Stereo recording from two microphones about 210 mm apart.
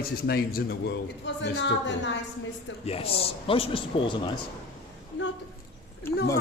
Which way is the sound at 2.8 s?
30° left (ahead or behind).